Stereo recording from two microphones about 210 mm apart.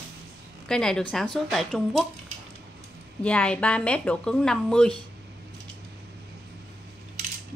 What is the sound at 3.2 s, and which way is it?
A woman's voice, 5° left (ahead or behind).